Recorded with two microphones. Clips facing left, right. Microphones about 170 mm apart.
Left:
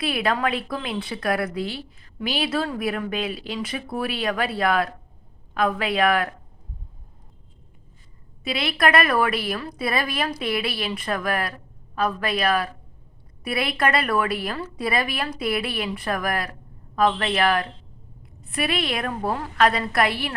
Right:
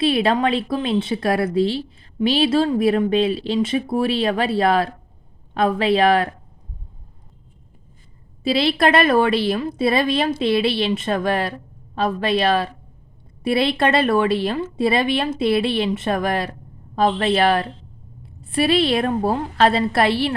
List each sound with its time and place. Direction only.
0.0 s speech: 25° right (ahead or behind)
8.4 s speech: 30° right (ahead or behind)